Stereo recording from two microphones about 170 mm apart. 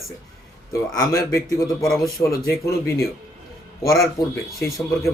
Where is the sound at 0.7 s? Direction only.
20° left (ahead or behind).